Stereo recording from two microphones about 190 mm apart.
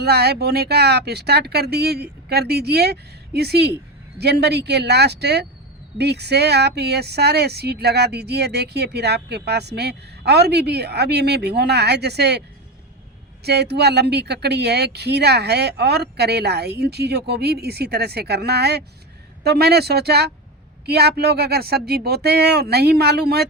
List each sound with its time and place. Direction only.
0.0 s speech: 55° right (ahead or behind)
13.4 s speech: 60° right (ahead or behind)